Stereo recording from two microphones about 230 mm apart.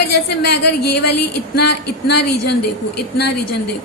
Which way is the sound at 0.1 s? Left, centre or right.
Left.